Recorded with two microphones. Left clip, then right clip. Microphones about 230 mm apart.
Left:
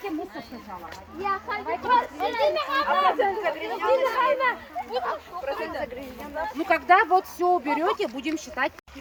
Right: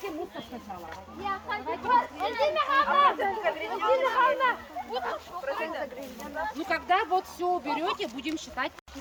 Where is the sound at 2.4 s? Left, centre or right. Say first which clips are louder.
Even; left.